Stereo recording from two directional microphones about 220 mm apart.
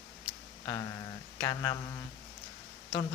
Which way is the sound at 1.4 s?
15° left (ahead or behind).